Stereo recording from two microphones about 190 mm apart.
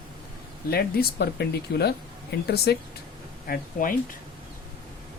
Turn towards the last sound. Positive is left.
turn(degrees=45)  # may be behind; listen again after turning